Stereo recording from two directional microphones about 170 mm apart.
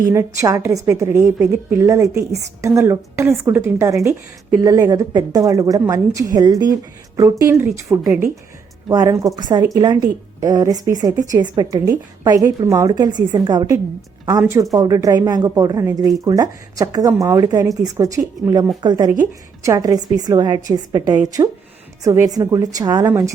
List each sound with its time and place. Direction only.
0.1 s a woman's voice: 15° right (ahead or behind)